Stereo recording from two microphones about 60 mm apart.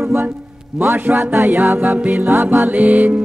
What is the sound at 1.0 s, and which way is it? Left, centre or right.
Music, right.